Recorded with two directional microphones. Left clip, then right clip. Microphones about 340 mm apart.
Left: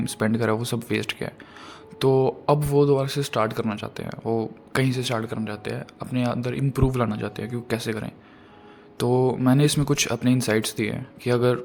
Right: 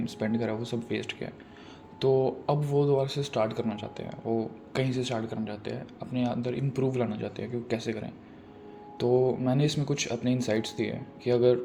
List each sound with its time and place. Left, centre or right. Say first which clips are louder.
0.0 s speech: left 7 dB; left